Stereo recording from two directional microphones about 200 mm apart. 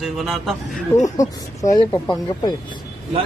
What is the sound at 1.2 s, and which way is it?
Speech, 15° left (ahead or behind).